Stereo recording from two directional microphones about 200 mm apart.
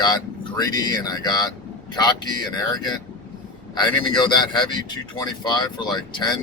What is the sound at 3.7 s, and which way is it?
Speech, 20° left (ahead or behind).